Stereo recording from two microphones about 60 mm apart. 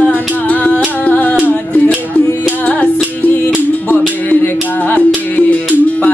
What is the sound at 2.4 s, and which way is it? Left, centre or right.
Music, left.